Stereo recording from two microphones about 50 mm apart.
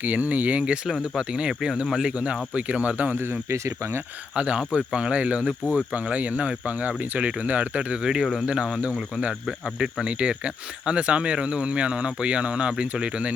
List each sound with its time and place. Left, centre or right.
0.0 s speech: right
4.4 s speech: right
5.9 s speech: right
8.2 s speech: centre
8.4 s speech: centre